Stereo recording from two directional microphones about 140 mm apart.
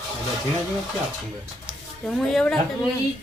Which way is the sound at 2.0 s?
5° left (ahead or behind).